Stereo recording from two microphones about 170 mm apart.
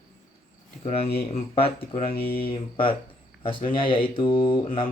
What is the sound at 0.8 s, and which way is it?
Mantra, 35° left (ahead or behind).